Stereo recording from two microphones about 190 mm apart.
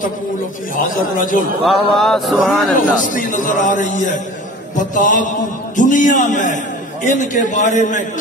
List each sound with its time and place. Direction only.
0.7 s a man's voice: 45° left (ahead or behind)
1.6 s a man's voice: centre (ahead or behind)
3.1 s a man's voice: 45° left (ahead or behind)